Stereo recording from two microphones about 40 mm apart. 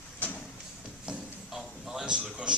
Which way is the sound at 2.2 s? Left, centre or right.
Right.